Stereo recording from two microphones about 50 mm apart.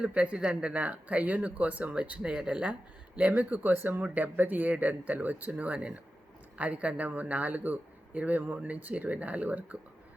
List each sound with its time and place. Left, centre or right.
0.0 s speech: right
3.2 s speech: right